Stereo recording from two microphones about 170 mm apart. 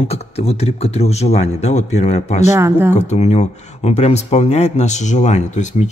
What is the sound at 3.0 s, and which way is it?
Speech, 40° left (ahead or behind).